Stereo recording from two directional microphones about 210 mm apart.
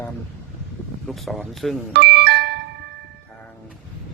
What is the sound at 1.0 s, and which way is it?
Speech, centre (ahead or behind).